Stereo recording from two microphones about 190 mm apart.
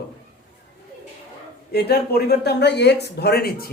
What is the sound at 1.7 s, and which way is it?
Speech, 55° left (ahead or behind).